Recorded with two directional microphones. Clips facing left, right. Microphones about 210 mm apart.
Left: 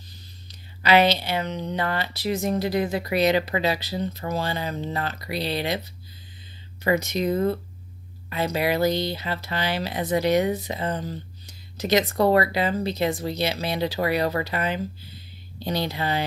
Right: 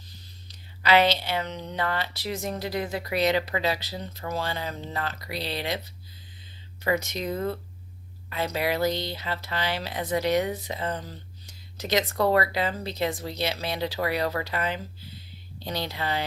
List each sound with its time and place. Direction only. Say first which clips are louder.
0.8 s speech: left 2 dB; 10° left (ahead or behind)
6.8 s speech: left 4 dB; 5° left (ahead or behind)
8.3 s speech: left 3 dB; 10° left (ahead or behind)
14.3 s speech: left 3 dB; 25° left (ahead or behind)
15.6 s speech: left 5 dB; 10° left (ahead or behind)